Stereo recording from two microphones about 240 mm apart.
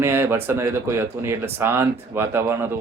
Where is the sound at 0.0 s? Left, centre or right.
Centre.